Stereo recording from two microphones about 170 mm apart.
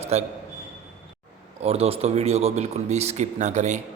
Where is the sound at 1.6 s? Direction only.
35° right (ahead or behind).